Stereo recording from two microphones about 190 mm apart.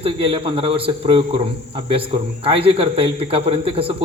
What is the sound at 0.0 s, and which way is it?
A man's voice, 30° right (ahead or behind).